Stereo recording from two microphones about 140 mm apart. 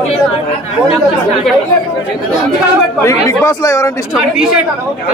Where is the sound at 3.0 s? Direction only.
20° left (ahead or behind).